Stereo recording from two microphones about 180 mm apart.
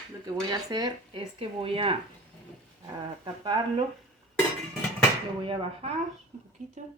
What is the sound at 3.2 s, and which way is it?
Speech, 25° right (ahead or behind).